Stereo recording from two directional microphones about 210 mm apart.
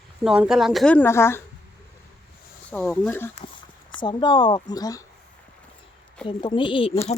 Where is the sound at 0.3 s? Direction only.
5° right (ahead or behind).